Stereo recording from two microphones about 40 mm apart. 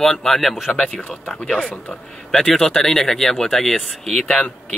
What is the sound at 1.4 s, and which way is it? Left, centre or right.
Speech, centre.